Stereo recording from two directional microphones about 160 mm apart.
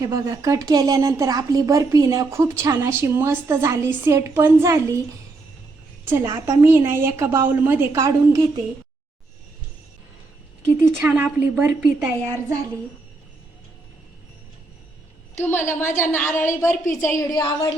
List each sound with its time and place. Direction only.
0.0 s a woman's voice: 20° right (ahead or behind)
6.1 s a woman's voice: 15° right (ahead or behind)
10.8 s a woman's voice: 15° right (ahead or behind)
15.4 s a woman's voice: 15° left (ahead or behind)